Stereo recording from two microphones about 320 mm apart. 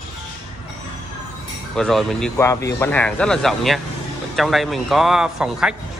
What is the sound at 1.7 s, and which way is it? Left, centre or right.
A man's voice, centre.